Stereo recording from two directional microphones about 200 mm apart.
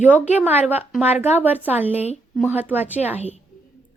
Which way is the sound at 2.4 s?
10° right (ahead or behind).